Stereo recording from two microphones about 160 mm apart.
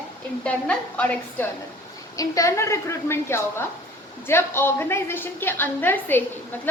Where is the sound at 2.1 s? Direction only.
20° left (ahead or behind).